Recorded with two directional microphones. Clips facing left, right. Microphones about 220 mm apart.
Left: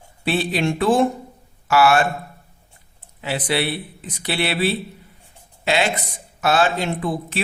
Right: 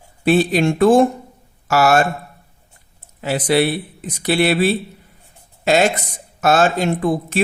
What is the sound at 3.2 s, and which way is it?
Speech, 45° right (ahead or behind).